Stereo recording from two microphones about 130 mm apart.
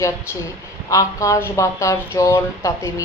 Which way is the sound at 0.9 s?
25° left (ahead or behind).